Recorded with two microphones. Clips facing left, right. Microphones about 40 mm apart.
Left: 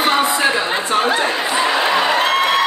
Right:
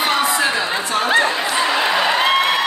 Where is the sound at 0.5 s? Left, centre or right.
Centre.